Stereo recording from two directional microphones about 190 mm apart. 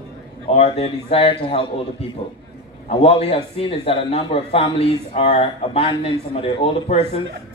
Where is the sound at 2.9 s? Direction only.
30° left (ahead or behind).